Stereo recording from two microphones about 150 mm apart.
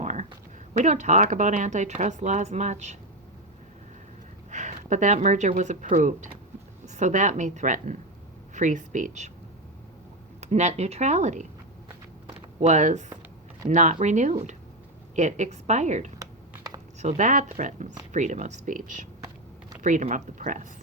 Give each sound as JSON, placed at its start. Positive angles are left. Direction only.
{"t": 0.0, "sound": "a sound", "side_deg": -55}
{"t": 0.7, "sound": "a woman's voice", "side_deg": -50}
{"t": 4.5, "sound": "a woman's voice", "side_deg": -55}
{"t": 10.4, "sound": "a woman's voice", "side_deg": -50}
{"t": 12.5, "sound": "a woman's voice", "side_deg": -50}